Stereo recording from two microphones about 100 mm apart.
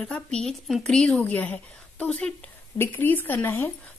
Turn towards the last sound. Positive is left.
turn(degrees=20)  # may be behind; listen again after turning